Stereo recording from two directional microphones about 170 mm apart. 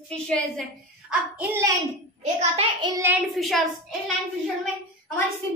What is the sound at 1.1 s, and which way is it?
Child singing, 10° right (ahead or behind).